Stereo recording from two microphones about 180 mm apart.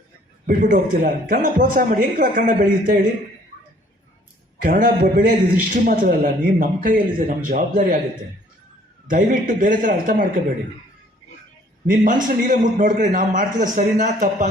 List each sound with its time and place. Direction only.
0.4 s a man's voice: 50° right (ahead or behind)
4.6 s a man's voice: 50° right (ahead or behind)
9.0 s a man's voice: 50° right (ahead or behind)
11.9 s a man's voice: 50° right (ahead or behind)